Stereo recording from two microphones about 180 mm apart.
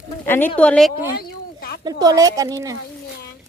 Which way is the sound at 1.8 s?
20° right (ahead or behind).